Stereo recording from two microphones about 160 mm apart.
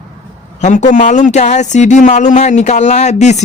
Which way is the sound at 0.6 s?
50° left (ahead or behind).